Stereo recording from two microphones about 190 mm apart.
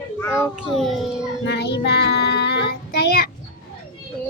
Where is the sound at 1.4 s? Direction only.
65° left (ahead or behind).